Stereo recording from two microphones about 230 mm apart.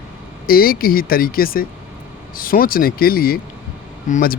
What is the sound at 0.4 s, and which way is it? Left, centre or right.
Speech, left.